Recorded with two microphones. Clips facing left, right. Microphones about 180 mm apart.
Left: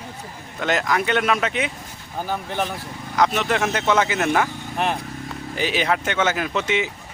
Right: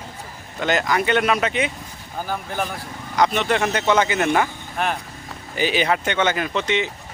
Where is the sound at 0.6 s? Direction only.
Centre (ahead or behind).